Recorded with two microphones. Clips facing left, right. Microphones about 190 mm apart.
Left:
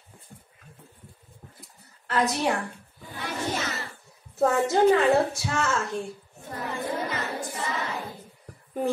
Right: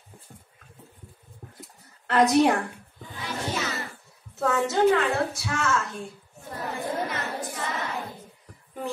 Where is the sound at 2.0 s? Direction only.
60° right (ahead or behind).